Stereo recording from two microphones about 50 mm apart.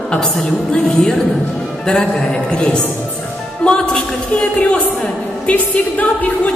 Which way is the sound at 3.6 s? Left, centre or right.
Centre.